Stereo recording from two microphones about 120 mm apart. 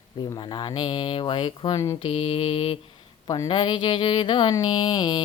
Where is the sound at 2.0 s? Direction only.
50° left (ahead or behind).